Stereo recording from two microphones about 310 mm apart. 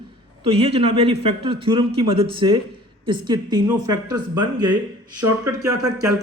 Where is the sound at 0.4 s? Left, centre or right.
Centre.